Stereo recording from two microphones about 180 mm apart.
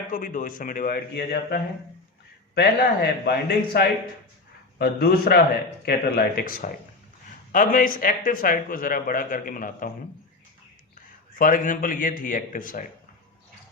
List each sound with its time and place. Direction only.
0.1 s a man's voice: 50° left (ahead or behind)
11.3 s a man's voice: 50° left (ahead or behind)